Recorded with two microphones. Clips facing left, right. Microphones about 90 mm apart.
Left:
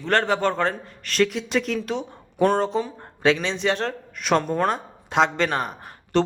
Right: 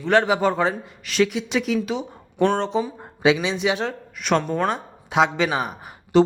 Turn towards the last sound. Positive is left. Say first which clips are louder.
# right 5 dB
turn(degrees=-10)  # may be behind; listen again after turning